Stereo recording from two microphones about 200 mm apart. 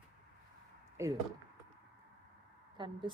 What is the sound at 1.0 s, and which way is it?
Speech, 15° right (ahead or behind).